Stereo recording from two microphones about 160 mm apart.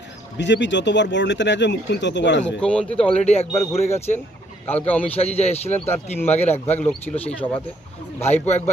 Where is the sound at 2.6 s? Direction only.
5° left (ahead or behind).